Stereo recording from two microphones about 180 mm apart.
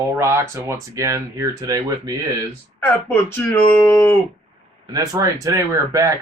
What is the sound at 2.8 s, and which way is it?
Speech, 10° left (ahead or behind).